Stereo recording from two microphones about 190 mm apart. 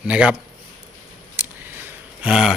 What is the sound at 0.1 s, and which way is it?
Speech, 5° right (ahead or behind).